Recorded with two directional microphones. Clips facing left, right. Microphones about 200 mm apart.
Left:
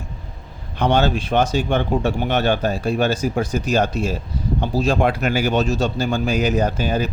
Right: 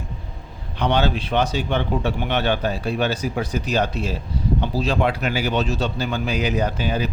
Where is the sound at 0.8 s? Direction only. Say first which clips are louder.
Left 3 dB; 50° left (ahead or behind).